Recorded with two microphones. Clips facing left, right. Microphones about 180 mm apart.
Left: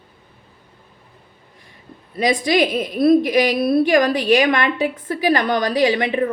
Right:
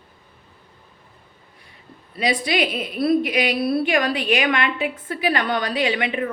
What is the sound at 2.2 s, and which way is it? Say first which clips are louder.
A woman's voice: left 5 dB; 45° left (ahead or behind).